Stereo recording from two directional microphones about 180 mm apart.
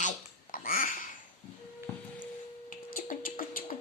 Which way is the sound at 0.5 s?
50° left (ahead or behind).